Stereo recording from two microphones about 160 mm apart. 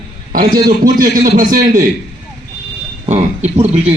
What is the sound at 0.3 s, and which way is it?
A man's voice, 65° right (ahead or behind).